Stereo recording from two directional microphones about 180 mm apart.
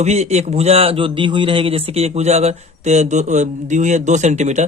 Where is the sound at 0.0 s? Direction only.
40° right (ahead or behind).